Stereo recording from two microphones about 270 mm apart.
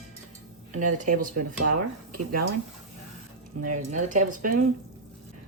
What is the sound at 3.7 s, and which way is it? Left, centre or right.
Speech, right.